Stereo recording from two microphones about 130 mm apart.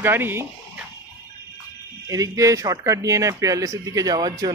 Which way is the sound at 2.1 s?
25° right (ahead or behind).